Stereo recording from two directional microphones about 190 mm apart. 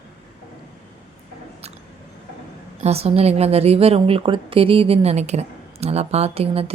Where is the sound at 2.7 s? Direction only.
35° right (ahead or behind).